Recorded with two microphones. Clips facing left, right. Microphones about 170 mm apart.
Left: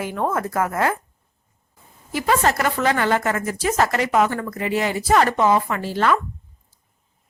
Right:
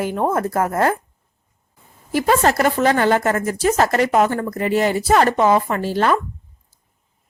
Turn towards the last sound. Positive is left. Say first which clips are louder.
# right 2 dB
turn(degrees=-35)  # may be behind; listen again after turning